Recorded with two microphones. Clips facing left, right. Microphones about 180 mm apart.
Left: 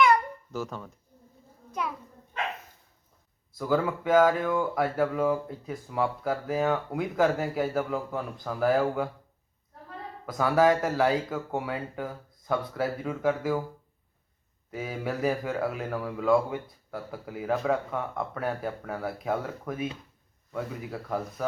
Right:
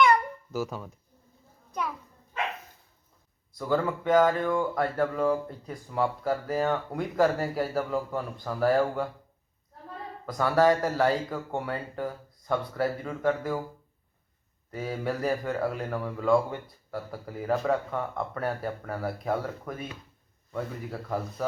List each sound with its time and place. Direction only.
0.5 s speech: 5° right (ahead or behind)
1.8 s a sound: centre (ahead or behind)
3.5 s speech: 5° left (ahead or behind)
10.2 s speech: centre (ahead or behind)
14.7 s speech: centre (ahead or behind)